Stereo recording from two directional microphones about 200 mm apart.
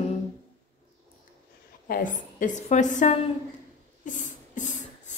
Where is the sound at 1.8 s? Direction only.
40° left (ahead or behind).